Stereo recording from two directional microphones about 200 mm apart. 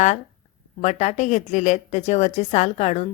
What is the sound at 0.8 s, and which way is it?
Speech, 35° left (ahead or behind).